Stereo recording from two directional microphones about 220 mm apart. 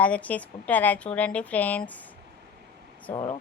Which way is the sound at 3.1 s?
20° left (ahead or behind).